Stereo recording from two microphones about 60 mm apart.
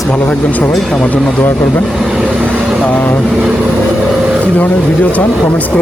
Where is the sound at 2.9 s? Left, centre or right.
Left.